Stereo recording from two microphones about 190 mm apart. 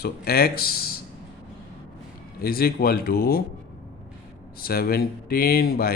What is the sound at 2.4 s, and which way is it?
A man's voice, 50° left (ahead or behind).